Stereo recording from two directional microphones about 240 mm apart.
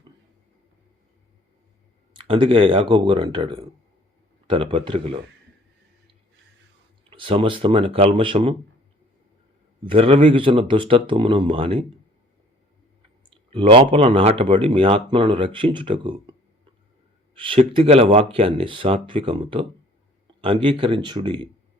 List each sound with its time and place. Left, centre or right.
2.1 s speech: right
7.1 s speech: right
9.8 s speech: right
13.3 s speech: right
17.3 s speech: right